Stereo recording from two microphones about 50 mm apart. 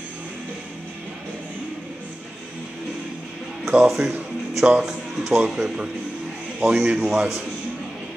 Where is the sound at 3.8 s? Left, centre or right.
Centre.